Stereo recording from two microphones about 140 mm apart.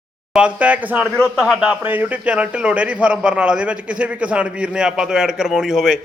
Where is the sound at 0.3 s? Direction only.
10° right (ahead or behind).